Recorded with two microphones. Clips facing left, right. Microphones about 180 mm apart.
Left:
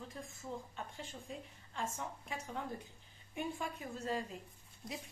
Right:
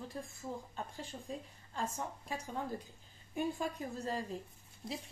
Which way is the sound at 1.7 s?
35° right (ahead or behind).